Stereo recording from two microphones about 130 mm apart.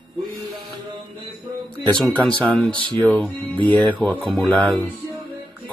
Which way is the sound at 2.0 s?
35° right (ahead or behind).